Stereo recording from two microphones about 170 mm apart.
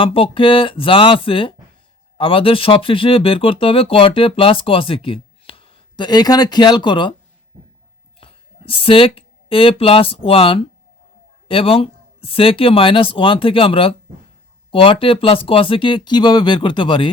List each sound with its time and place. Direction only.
0.0 s speech: 30° left (ahead or behind)
8.2 s speech: 30° left (ahead or behind)